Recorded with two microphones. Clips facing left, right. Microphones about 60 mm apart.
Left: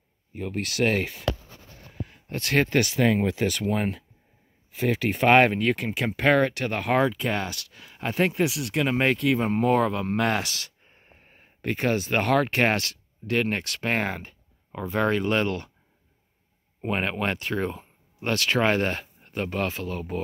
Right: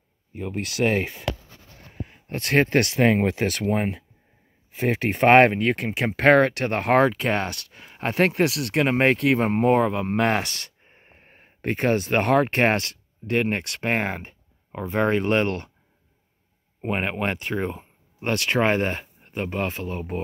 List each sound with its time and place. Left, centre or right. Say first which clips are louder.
0.4 s speech: right 1 dB; centre
2.2 s speech: right 3 dB; right
3.7 s speech: right 2 dB; centre
4.7 s speech: right 1 dB; right
5.5 s speech: right 1 dB; right
8.2 s speech: right 3 dB; right
8.8 s speech: right 3 dB; right
10.9 s speech: right 2 dB; right
15.4 s speech: right 2 dB; right
16.8 s speech: right 1 dB; centre